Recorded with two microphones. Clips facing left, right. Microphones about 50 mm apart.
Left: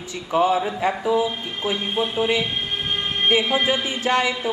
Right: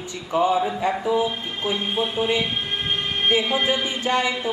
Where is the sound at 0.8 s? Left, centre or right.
Centre.